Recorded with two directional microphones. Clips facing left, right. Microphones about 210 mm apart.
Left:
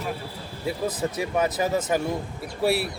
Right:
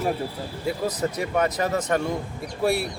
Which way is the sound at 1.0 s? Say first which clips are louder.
Even; 5° left (ahead or behind).